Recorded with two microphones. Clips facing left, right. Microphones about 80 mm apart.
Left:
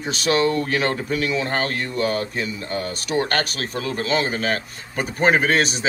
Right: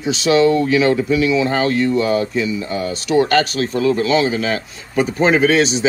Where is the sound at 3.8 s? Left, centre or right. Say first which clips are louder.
Right 7 dB; left.